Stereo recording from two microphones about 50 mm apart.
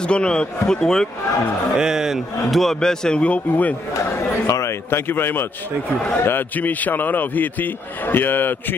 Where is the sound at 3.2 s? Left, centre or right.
Left.